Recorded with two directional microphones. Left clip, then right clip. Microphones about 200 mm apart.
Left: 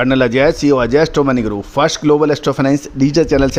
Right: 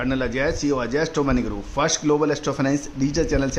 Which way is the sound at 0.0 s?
40° left (ahead or behind).